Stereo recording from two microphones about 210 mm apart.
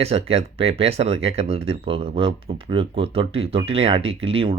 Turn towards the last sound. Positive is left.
turn(degrees=-25)  # may be behind; listen again after turning